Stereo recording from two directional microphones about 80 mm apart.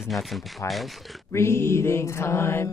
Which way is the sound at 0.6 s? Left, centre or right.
Left.